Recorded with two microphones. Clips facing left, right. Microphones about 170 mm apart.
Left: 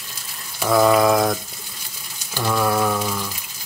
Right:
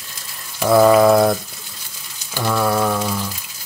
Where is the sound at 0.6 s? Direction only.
10° right (ahead or behind).